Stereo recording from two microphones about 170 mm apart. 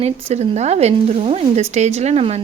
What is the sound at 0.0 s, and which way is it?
Speech, 40° right (ahead or behind).